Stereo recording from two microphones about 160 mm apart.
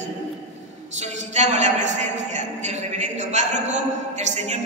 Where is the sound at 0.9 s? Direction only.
45° right (ahead or behind).